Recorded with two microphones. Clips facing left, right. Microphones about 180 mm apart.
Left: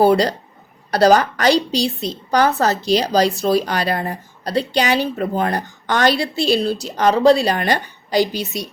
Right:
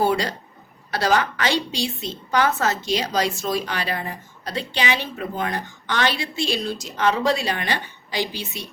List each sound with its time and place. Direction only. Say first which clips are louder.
0.0 s a woman's voice: left 7 dB; 35° left (ahead or behind)